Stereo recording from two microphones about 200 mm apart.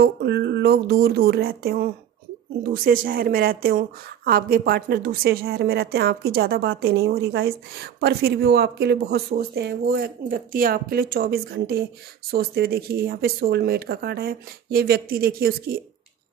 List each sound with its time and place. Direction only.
0.0 s speech: 55° right (ahead or behind)